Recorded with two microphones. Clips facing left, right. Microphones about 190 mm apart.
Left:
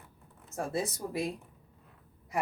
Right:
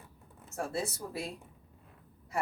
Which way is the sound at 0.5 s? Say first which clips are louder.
Left 2 dB; 15° left (ahead or behind).